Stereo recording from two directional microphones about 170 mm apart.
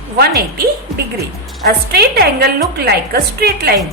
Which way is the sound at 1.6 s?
70° right (ahead or behind).